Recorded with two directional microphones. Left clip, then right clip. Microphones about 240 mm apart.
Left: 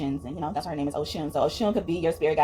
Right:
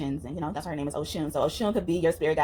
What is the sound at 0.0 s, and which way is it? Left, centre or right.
Speech, right.